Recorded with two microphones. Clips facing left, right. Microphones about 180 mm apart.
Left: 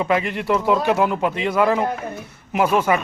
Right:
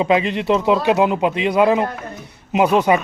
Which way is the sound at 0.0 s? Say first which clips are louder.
Right 4 dB; 20° right (ahead or behind).